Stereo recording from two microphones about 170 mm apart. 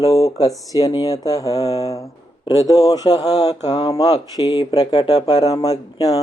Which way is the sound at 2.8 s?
20° left (ahead or behind).